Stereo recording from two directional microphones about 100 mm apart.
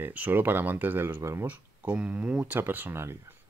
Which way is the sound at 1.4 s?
15° right (ahead or behind).